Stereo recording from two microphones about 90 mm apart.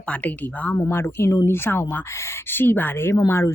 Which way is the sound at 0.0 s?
15° left (ahead or behind).